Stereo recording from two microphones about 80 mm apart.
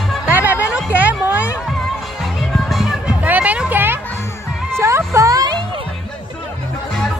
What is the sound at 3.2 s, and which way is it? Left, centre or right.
Music, centre.